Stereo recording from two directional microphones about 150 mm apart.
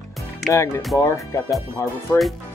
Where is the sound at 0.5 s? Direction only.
20° left (ahead or behind).